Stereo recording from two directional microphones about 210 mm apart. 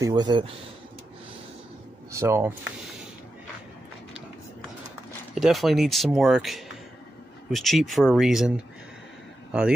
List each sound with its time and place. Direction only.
0.0 s speech: 20° right (ahead or behind)
2.1 s speech: 10° right (ahead or behind)
5.3 s a man's voice: centre (ahead or behind)